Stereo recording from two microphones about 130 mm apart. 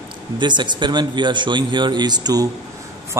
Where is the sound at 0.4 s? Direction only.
35° right (ahead or behind).